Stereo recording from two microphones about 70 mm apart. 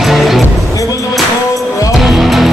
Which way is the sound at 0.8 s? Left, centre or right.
Left.